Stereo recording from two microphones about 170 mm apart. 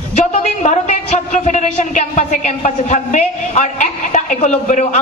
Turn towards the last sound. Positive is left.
turn(degrees=45)  # may be behind; listen again after turning